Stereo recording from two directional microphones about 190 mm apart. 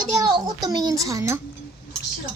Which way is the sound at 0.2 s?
20° right (ahead or behind).